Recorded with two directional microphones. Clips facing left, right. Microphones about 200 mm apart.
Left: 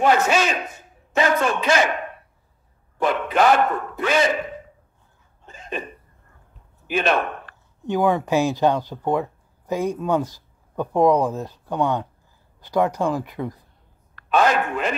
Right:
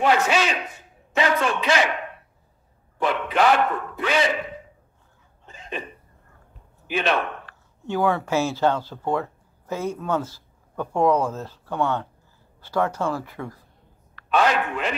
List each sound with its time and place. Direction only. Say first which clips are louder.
0.0 s a man's voice: left 2 dB; 45° left (ahead or behind)
5.5 s hiccup: left 3 dB; 45° left (ahead or behind)
6.9 s speech: left 2 dB; 45° left (ahead or behind)
7.8 s speech: left 3 dB; 15° left (ahead or behind)
14.1 s a sound: left 2 dB; 45° left (ahead or behind)